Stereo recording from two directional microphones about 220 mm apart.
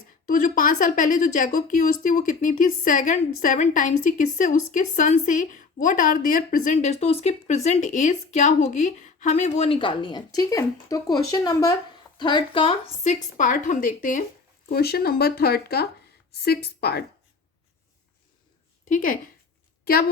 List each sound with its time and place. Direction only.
0.3 s a woman's voice: 40° left (ahead or behind)
13.3 s a woman's voice: 35° left (ahead or behind)
18.9 s a woman's voice: 40° left (ahead or behind)